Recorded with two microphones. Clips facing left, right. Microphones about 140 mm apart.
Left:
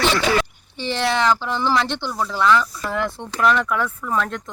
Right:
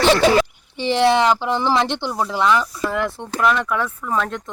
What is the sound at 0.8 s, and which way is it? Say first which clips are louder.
Speech: right 5 dB; 25° right (ahead or behind).